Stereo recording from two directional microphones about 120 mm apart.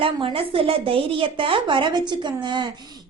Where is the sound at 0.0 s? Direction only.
50° right (ahead or behind).